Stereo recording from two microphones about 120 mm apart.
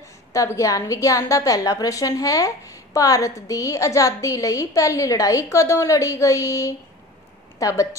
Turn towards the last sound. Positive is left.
turn(degrees=25)  # may be behind; listen again after turning